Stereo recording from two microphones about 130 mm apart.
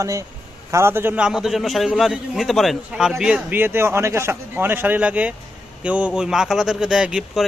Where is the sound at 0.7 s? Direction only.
20° right (ahead or behind).